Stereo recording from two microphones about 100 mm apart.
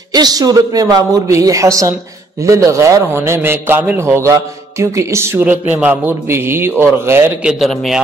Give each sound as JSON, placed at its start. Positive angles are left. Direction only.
{"t": 0.1, "sound": "a man's voice", "side_deg": -40}
{"t": 5.4, "sound": "a man's voice", "side_deg": -15}
{"t": 7.4, "sound": "a man's voice", "side_deg": 0}